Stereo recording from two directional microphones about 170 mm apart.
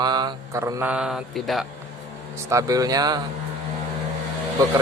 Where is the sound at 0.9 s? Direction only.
5° right (ahead or behind).